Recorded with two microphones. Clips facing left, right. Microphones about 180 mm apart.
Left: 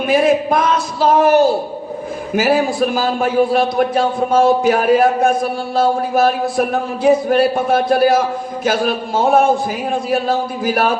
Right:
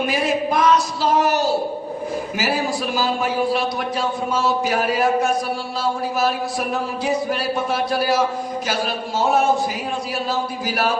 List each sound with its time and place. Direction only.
0.0 s a man's voice: 55° left (ahead or behind)